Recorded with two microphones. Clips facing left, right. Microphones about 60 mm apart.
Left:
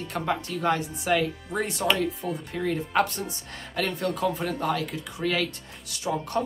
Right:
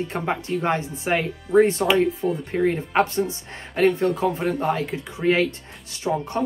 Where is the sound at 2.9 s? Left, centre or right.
Right.